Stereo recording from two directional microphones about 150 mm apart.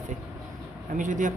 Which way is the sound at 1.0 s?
55° right (ahead or behind).